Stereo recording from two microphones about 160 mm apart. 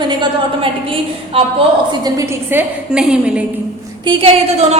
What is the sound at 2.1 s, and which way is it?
A woman's voice, 15° right (ahead or behind).